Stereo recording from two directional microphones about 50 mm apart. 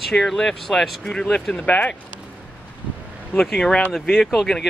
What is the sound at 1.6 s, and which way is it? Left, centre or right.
Speech, left.